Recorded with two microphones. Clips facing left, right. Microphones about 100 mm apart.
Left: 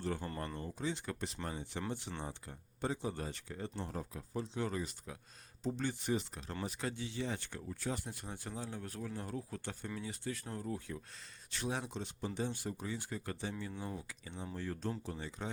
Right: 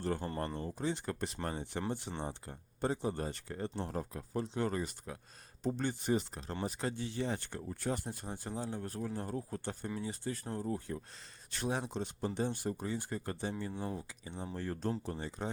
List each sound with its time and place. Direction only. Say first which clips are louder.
0.0 s speech: right 3 dB; 40° right (ahead or behind)
0.3 s speech: right 4 dB; 30° right (ahead or behind)
0.8 s speech: right 3 dB; 45° right (ahead or behind)
2.0 s speech: right 3 dB; 30° right (ahead or behind)
2.8 s speech: right 4 dB; 45° right (ahead or behind); by 14.5 s 25° right (ahead or behind)
14.5 s speech: right 3 dB; 45° right (ahead or behind)